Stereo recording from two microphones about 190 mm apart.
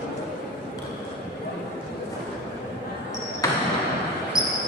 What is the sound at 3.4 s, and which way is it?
Basketball bounce, 15° left (ahead or behind).